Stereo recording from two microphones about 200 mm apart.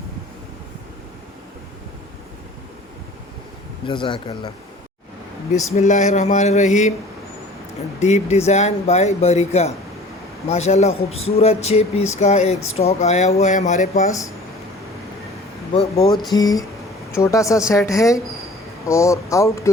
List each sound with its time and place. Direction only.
3.8 s speech: 25° left (ahead or behind)
5.5 s speech: 35° left (ahead or behind)
7.9 s speech: 35° left (ahead or behind)
14.1 s speech: 15° left (ahead or behind)
15.7 s speech: 30° left (ahead or behind)
16.0 s speech: centre (ahead or behind)
16.3 s speech: 20° left (ahead or behind)